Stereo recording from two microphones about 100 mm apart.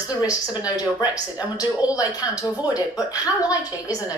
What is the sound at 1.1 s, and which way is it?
Speech, 35° left (ahead or behind).